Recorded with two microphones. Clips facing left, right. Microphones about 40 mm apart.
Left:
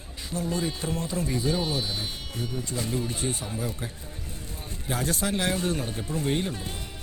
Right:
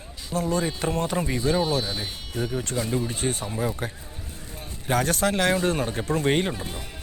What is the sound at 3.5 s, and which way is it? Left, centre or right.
Speech, right.